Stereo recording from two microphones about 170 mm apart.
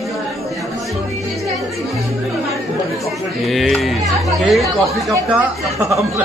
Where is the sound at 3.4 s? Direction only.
Centre (ahead or behind).